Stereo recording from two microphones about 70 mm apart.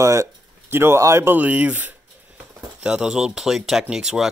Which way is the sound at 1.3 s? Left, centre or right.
Right.